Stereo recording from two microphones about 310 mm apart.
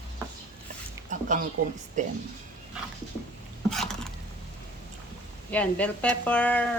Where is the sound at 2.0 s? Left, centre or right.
Right.